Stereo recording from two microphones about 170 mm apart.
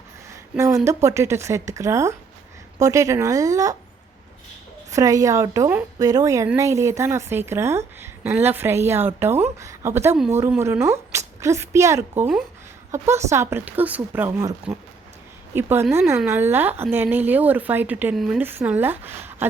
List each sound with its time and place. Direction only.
0.5 s a woman's voice: 20° right (ahead or behind)
4.9 s a woman's voice: 20° right (ahead or behind)